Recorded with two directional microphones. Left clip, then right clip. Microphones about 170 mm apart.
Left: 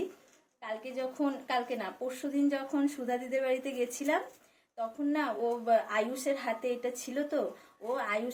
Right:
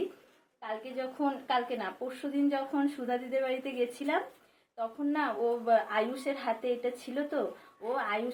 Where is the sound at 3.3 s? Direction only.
45° left (ahead or behind).